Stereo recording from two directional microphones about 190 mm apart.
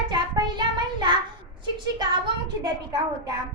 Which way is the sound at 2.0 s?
25° right (ahead or behind).